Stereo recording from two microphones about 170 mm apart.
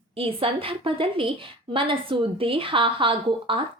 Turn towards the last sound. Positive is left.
turn(degrees=-30)  # may be behind; listen again after turning